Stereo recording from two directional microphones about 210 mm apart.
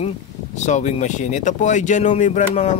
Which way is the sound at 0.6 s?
35° left (ahead or behind).